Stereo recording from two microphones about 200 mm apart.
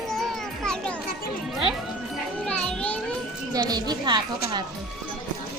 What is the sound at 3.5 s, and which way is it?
Speech, 20° right (ahead or behind).